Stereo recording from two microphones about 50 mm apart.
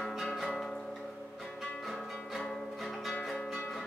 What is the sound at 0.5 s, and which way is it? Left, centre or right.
Music, centre.